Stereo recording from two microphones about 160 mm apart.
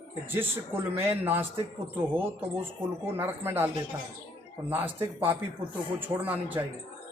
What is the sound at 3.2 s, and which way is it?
Speech, 15° right (ahead or behind).